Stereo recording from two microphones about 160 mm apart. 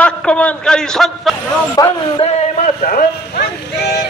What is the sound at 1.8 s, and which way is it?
Speech, 25° left (ahead or behind).